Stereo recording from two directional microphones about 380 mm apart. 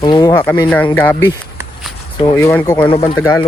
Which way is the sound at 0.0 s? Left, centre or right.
Centre.